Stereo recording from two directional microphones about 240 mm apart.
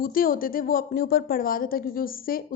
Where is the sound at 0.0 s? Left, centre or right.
Left.